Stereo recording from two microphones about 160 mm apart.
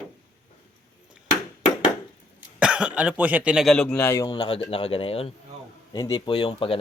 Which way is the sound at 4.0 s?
15° left (ahead or behind).